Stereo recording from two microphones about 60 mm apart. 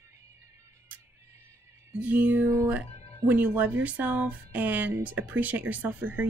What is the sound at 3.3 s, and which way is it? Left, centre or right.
Speech, right.